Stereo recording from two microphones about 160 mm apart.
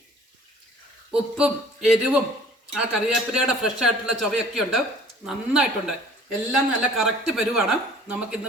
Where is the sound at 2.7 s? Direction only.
5° right (ahead or behind).